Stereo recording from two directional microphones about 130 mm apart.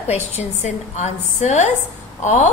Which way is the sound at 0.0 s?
60° left (ahead or behind).